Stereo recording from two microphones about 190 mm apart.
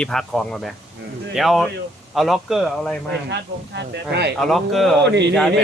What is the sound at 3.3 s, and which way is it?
Speech, 60° right (ahead or behind).